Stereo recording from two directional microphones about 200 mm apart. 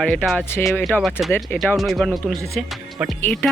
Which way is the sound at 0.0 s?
5° left (ahead or behind).